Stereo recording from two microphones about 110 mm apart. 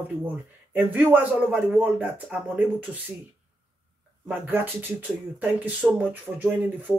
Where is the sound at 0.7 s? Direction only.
15° right (ahead or behind).